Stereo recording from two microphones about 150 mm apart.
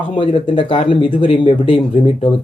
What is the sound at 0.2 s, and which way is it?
Speech, 35° left (ahead or behind).